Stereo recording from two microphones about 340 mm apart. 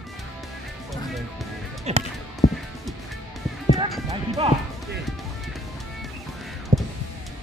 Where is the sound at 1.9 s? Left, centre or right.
Centre.